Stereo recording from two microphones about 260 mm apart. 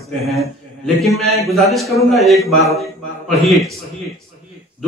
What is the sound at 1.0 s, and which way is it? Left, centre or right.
A man's voice, centre.